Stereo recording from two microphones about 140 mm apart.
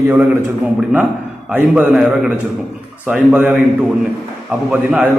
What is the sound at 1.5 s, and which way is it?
A man's voice, 10° right (ahead or behind).